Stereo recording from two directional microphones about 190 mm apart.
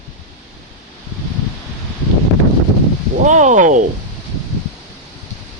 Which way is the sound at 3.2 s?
40° right (ahead or behind).